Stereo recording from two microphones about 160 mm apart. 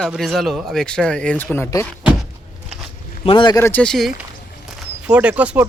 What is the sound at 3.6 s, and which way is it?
Speech, 10° left (ahead or behind).